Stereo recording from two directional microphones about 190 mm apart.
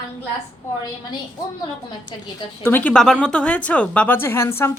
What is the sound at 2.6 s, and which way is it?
Speech, 10° left (ahead or behind).